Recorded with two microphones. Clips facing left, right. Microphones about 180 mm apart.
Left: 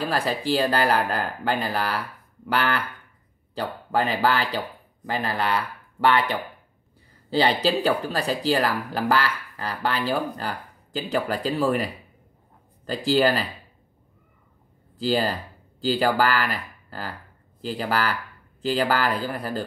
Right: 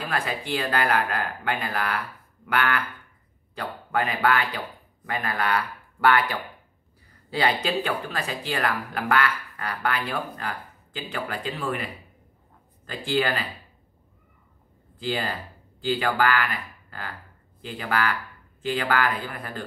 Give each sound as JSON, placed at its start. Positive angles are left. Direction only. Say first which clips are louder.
{"t": 0.0, "sound": "speech", "louder": "left 4 dB", "side_deg": 35}
{"t": 15.0, "sound": "speech", "louder": "left 5 dB", "side_deg": 35}